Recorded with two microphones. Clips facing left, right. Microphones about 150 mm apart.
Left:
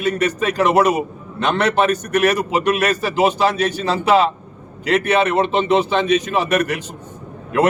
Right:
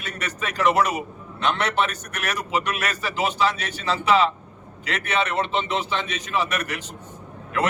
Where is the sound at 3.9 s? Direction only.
45° left (ahead or behind).